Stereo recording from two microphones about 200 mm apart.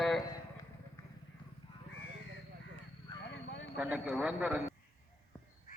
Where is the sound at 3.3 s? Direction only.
65° left (ahead or behind).